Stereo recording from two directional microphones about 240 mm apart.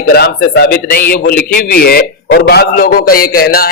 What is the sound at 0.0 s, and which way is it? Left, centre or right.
A man's voice, left.